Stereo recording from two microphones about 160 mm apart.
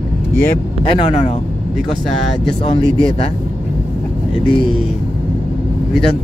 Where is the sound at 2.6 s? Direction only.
35° left (ahead or behind).